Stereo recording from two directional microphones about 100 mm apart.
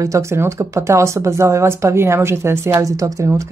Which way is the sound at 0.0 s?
30° right (ahead or behind).